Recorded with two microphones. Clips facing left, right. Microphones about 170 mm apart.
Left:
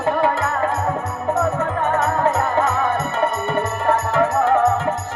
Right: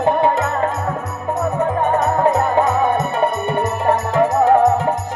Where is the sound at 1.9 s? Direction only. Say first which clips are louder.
Right 2 dB; 15° right (ahead or behind).